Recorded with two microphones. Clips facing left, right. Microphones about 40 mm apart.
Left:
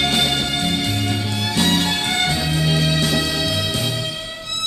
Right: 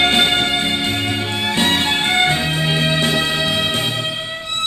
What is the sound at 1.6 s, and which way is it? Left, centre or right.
Music, right.